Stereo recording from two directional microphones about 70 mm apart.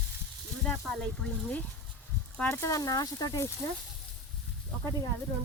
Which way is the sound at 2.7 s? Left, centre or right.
Left.